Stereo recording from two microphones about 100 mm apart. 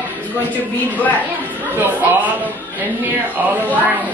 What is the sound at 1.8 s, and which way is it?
Speech, 15° right (ahead or behind).